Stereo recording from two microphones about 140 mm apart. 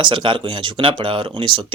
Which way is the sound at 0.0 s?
35° right (ahead or behind).